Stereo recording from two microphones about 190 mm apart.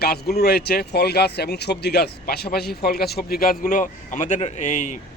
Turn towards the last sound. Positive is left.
turn(degrees=40)  # may be behind; listen again after turning